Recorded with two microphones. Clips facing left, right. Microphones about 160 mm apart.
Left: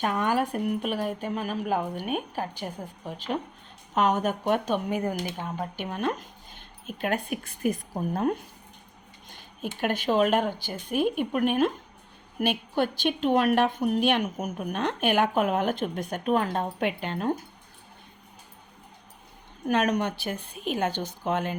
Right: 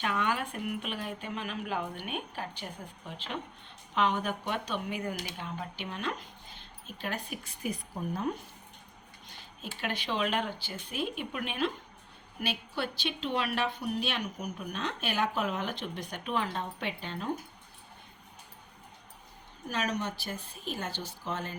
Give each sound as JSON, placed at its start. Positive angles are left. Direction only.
{"t": 0.0, "sound": "a woman's voice", "side_deg": 40}
{"t": 19.6, "sound": "speech", "side_deg": 55}